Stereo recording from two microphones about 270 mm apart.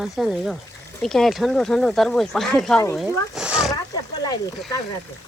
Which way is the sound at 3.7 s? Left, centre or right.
Centre.